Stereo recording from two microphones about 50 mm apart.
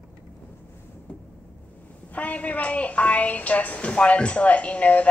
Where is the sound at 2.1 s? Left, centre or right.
Left.